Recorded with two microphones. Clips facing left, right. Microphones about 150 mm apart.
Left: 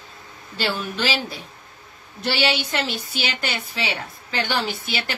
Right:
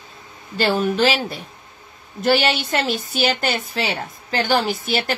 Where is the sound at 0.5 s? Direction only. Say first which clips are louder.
Right 8 dB; 50° right (ahead or behind).